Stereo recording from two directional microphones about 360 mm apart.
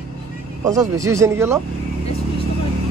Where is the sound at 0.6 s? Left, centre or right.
Centre.